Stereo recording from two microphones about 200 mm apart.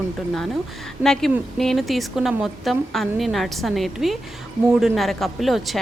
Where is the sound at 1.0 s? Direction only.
Centre (ahead or behind).